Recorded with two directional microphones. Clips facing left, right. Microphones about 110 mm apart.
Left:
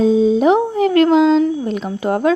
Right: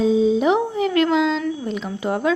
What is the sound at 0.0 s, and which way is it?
Speech, 45° left (ahead or behind).